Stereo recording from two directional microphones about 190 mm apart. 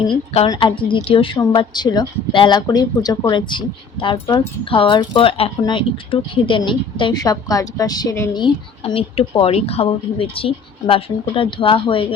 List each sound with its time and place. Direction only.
0.1 s a woman's voice: 25° left (ahead or behind)